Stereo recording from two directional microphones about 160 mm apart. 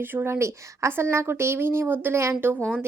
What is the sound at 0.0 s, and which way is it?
Speech, 15° right (ahead or behind).